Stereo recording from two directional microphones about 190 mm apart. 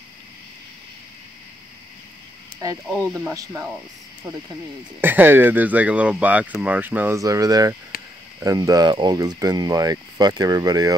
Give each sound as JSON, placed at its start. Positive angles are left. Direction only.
{"t": 3.1, "sound": "speech", "side_deg": -15}
{"t": 5.0, "sound": "speech", "side_deg": -10}